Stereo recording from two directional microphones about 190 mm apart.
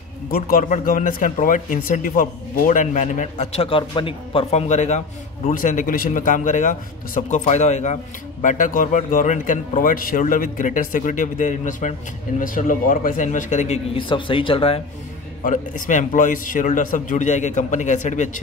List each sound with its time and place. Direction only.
0.3 s a man's voice: 45° left (ahead or behind)
13.9 s speech: 25° left (ahead or behind)
15.4 s speech: 40° left (ahead or behind)